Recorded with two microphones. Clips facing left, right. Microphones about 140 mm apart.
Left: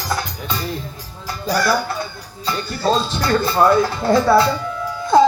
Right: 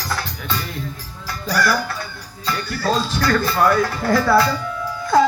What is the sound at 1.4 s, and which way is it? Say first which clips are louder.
Music: left 2 dB; 25° left (ahead or behind).